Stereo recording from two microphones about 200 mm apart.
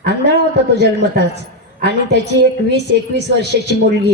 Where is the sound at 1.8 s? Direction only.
55° right (ahead or behind).